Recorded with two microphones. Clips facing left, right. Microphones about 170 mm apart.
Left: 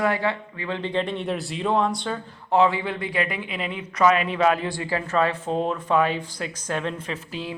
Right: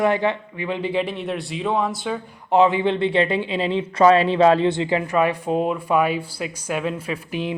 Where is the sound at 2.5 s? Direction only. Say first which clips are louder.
Right 4 dB; 20° right (ahead or behind).